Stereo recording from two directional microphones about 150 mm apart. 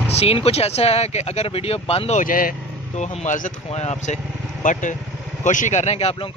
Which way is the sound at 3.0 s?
50° left (ahead or behind).